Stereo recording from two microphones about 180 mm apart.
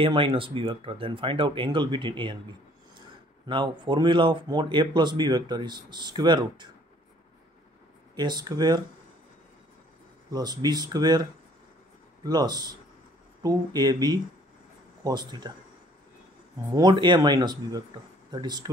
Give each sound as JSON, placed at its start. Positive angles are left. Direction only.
{"t": 0.0, "sound": "speech", "side_deg": -30}
{"t": 8.2, "sound": "speech", "side_deg": -25}
{"t": 10.3, "sound": "speech", "side_deg": -20}
{"t": 16.7, "sound": "speech", "side_deg": -25}